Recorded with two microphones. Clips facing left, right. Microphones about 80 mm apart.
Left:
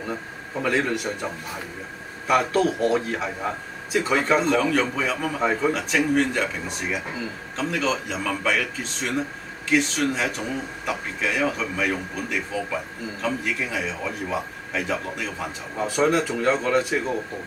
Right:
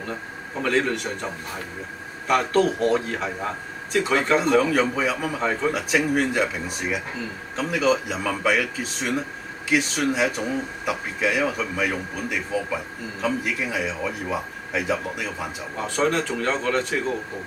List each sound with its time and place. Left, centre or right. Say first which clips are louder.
0.6 s a man's voice: right 1 dB; centre
5.4 s speech: left 3 dB; centre
5.7 s a man's voice: even; centre
15.8 s speech: left 2 dB; centre